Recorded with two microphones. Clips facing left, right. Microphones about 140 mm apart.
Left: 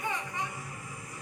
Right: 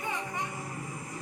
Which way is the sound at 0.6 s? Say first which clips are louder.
Right 5 dB; 40° right (ahead or behind).